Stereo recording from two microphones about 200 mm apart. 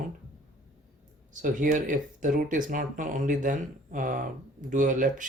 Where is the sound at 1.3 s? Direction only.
40° right (ahead or behind).